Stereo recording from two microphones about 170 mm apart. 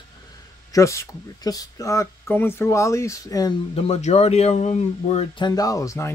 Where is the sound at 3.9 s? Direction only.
40° left (ahead or behind).